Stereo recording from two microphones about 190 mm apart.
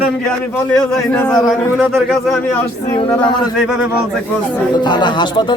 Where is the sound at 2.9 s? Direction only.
25° left (ahead or behind).